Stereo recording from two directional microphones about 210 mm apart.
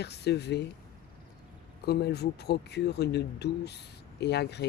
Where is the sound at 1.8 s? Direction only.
50° left (ahead or behind).